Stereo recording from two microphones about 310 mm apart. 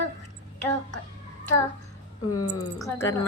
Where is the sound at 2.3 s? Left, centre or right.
Left.